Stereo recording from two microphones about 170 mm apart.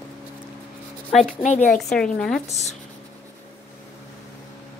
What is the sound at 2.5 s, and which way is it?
Speech, 40° left (ahead or behind).